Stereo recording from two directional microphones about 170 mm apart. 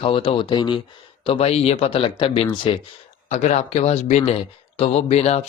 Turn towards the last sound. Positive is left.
turn(degrees=40)  # may be behind; listen again after turning